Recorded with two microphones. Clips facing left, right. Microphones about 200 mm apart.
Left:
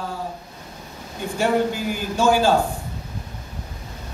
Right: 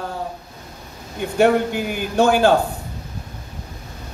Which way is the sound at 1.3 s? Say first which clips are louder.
Right 4 dB; 60° right (ahead or behind).